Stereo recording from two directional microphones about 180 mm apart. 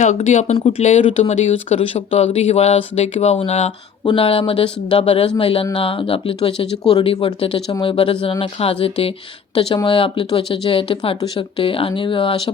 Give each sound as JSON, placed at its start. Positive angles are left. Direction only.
{"t": 0.0, "sound": "speech", "side_deg": 40}